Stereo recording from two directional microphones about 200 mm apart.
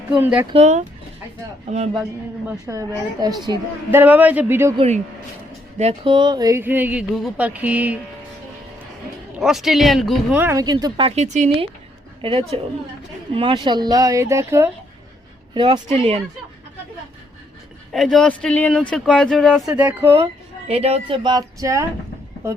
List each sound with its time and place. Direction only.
0.1 s a woman's voice: 5° right (ahead or behind)
0.5 s speech: 35° right (ahead or behind)
2.5 s a woman's voice: 15° right (ahead or behind)
4.0 s a woman's voice: 5° right (ahead or behind)
5.8 s a woman's voice: 25° right (ahead or behind); by 7.9 s 10° right (ahead or behind)
9.4 s a woman's voice: centre (ahead or behind)
15.5 s speech: 25° right (ahead or behind)
17.9 s a woman's voice: centre (ahead or behind)
20.1 s speech: 30° right (ahead or behind)